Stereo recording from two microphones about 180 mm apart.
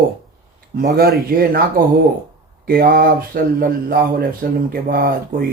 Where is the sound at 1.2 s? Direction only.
55° right (ahead or behind).